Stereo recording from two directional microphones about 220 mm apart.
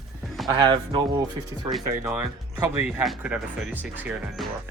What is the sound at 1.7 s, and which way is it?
Speech, 5° right (ahead or behind).